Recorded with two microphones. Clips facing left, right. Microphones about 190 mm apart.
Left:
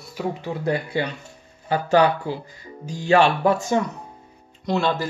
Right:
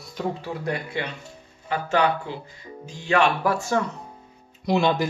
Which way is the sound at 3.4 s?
20° left (ahead or behind).